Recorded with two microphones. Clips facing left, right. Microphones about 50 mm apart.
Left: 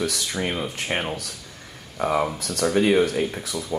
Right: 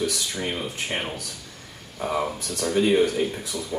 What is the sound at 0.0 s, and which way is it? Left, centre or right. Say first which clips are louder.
Speech: left 1 dB; left.